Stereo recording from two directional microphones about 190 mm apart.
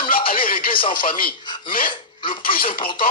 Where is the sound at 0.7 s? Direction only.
25° left (ahead or behind).